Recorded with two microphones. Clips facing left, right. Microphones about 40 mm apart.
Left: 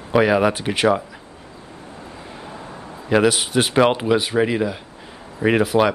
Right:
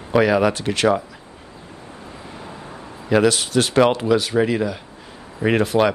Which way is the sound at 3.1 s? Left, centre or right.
Centre.